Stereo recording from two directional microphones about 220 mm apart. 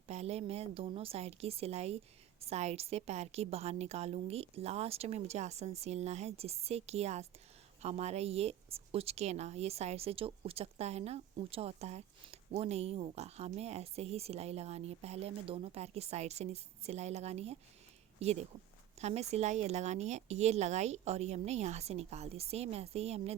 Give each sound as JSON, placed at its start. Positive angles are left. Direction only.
{"t": 0.1, "sound": "a woman's voice", "side_deg": -30}